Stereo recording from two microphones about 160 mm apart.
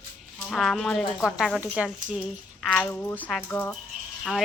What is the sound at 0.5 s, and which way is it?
A woman's voice, centre (ahead or behind).